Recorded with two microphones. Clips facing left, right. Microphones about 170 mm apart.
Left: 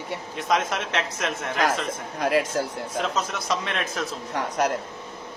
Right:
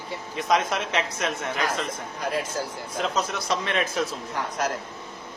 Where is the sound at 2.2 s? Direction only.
75° left (ahead or behind).